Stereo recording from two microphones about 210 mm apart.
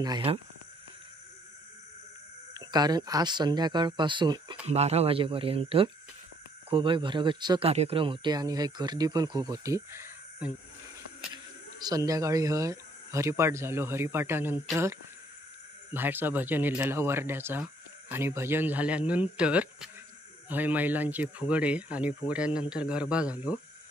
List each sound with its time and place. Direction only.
0.0 s speech: 25° right (ahead or behind)
2.5 s speech: 20° right (ahead or behind)
11.8 s speech: 15° right (ahead or behind)
15.9 s speech: 10° right (ahead or behind)